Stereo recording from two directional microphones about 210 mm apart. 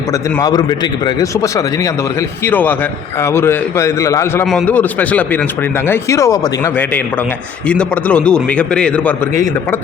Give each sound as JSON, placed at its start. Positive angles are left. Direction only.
{"t": 0.1, "sound": "a man's voice", "side_deg": 15}